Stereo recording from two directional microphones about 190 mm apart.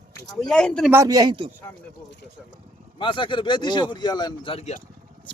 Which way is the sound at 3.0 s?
25° left (ahead or behind).